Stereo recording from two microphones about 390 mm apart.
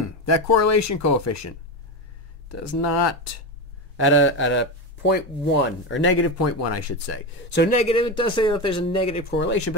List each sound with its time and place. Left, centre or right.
0.0 s speech: left
3.9 s speech: left
7.5 s speech: left
9.3 s speech: left